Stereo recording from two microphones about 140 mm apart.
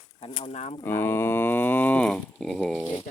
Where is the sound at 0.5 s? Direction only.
50° left (ahead or behind).